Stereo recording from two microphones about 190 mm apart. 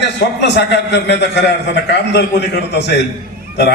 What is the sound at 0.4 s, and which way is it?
A man's voice, 60° left (ahead or behind).